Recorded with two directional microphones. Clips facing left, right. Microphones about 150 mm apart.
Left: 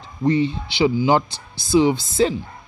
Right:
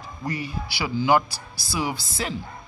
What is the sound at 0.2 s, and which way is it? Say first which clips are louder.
Speech: left 12 dB; 25° left (ahead or behind).